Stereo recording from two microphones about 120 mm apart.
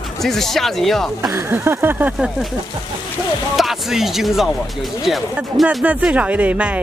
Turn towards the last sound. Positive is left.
turn(degrees=-10)  # may be behind; listen again after turning